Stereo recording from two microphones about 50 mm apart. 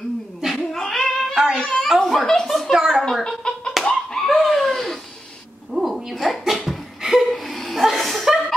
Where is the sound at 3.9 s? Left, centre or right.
Centre.